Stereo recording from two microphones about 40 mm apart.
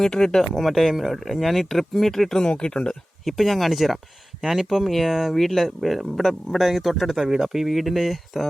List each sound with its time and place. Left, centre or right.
0.1 s speech: centre
0.6 s speech: centre
2.4 s speech: left
3.2 s speech: centre